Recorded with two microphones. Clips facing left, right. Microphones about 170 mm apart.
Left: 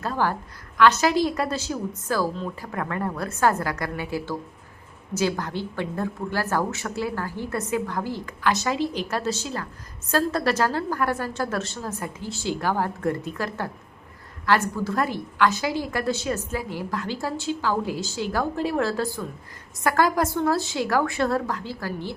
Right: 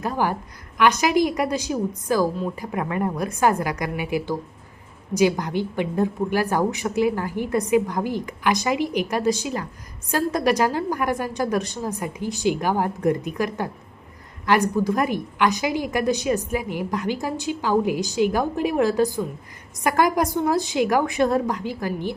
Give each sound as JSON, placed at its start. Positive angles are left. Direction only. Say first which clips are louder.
{"t": 0.0, "sound": "a woman's voice", "louder": "right 2 dB", "side_deg": -15}